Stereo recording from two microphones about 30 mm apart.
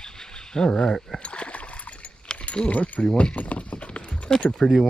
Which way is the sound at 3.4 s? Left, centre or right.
Left.